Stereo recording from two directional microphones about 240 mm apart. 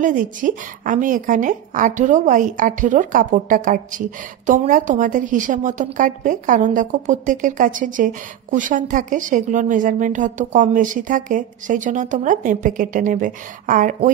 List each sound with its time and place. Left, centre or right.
0.0 s a woman's voice: right